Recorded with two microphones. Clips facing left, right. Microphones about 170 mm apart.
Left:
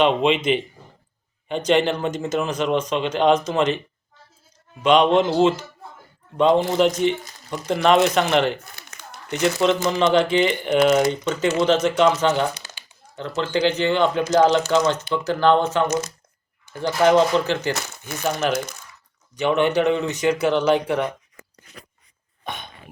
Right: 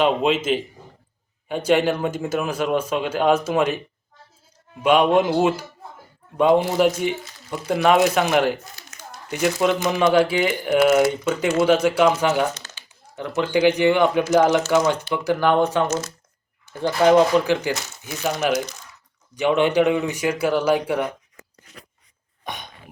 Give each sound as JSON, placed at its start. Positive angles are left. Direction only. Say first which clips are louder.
{"t": 0.0, "sound": "speech", "louder": "left 1 dB", "side_deg": -5}
{"t": 4.8, "sound": "speech", "louder": "even", "side_deg": -10}
{"t": 12.5, "sound": "crumpling", "louder": "right 1 dB", "side_deg": 10}
{"t": 13.1, "sound": "speech", "louder": "right 2 dB", "side_deg": -15}
{"t": 15.9, "sound": "speech", "louder": "left 1 dB", "side_deg": 15}
{"t": 17.0, "sound": "speech", "louder": "right 1 dB", "side_deg": -15}